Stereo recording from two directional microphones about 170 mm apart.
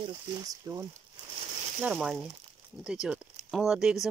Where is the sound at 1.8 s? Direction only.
5° right (ahead or behind).